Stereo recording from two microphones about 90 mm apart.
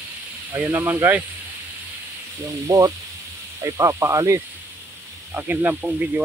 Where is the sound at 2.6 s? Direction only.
40° right (ahead or behind).